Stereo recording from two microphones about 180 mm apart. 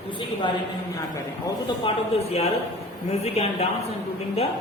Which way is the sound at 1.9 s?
35° left (ahead or behind).